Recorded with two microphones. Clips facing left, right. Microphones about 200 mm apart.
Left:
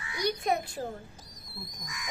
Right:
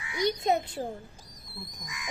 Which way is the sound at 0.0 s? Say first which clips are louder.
Right 3 dB; 20° right (ahead or behind).